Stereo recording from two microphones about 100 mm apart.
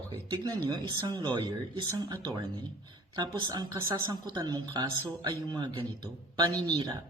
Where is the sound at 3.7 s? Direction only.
30° right (ahead or behind).